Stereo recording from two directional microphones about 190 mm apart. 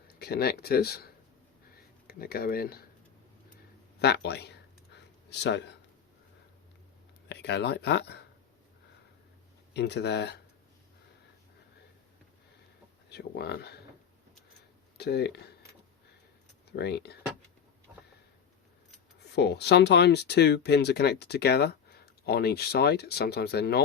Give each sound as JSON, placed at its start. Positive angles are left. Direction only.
{"t": 0.2, "sound": "speech", "side_deg": 55}
{"t": 4.0, "sound": "speech", "side_deg": 60}
{"t": 7.3, "sound": "speech", "side_deg": 60}
{"t": 9.7, "sound": "speech", "side_deg": 60}
{"t": 13.1, "sound": "speech", "side_deg": 60}
{"t": 14.9, "sound": "speech", "side_deg": 60}
{"t": 16.7, "sound": "speech", "side_deg": 60}
{"t": 19.3, "sound": "speech", "side_deg": 60}